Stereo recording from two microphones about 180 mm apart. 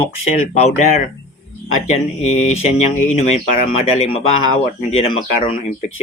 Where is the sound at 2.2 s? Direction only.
40° left (ahead or behind).